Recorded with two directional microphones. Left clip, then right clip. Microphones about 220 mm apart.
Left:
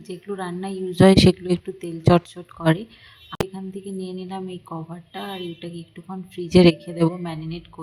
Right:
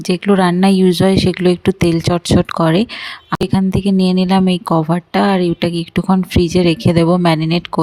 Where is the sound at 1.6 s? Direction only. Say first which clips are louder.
Right 12 dB; 50° right (ahead or behind).